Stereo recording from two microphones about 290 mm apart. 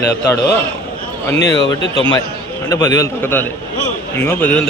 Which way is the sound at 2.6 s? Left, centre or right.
Centre.